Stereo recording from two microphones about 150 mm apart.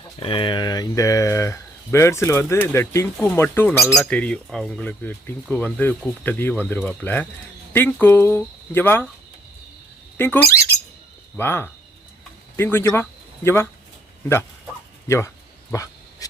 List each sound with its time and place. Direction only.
0.2 s speech: 35° left (ahead or behind); by 3.9 s 15° left (ahead or behind)
3.9 s speech: 5° left (ahead or behind)
10.2 s speech: 15° left (ahead or behind)
15.0 s speech: 20° left (ahead or behind)